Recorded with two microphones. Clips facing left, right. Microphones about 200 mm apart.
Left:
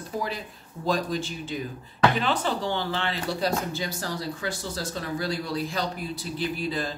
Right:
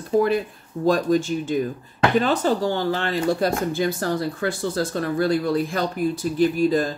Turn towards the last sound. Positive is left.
turn(degrees=-45)  # may be behind; listen again after turning